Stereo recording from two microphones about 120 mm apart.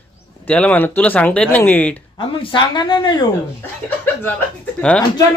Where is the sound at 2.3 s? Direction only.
40° left (ahead or behind).